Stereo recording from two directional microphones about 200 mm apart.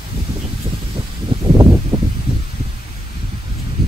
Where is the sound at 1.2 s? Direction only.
25° right (ahead or behind).